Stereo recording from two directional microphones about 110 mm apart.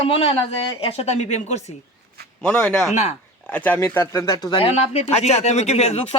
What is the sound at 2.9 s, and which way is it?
Speech, 80° left.